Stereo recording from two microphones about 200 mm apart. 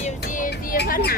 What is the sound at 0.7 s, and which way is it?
Vehicle, 50° left (ahead or behind).